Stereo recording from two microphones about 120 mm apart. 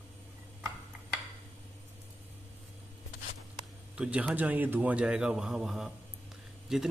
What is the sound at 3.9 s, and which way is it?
A man's voice, 10° right (ahead or behind).